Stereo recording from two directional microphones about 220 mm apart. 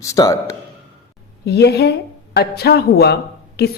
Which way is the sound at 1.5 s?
50° left (ahead or behind).